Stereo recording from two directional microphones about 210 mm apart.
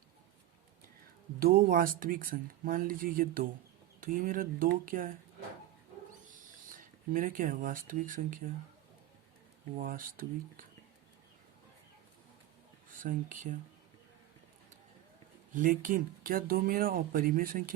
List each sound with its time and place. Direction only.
1.4 s speech: 45° right (ahead or behind)
6.3 s speech: 40° right (ahead or behind)
9.7 s speech: 40° right (ahead or behind)
13.0 s speech: 40° right (ahead or behind)
15.5 s speech: 40° right (ahead or behind)